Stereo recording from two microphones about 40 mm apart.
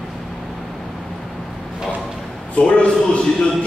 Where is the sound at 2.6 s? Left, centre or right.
Left.